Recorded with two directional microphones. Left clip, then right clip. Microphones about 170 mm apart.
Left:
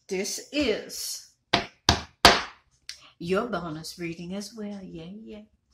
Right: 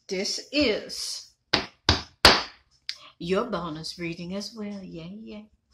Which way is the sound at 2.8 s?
20° right (ahead or behind).